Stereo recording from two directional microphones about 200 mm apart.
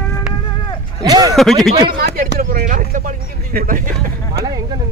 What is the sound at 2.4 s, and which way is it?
Speech, 45° right (ahead or behind).